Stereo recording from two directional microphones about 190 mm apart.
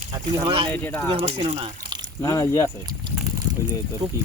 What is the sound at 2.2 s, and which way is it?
Speech, 20° left (ahead or behind).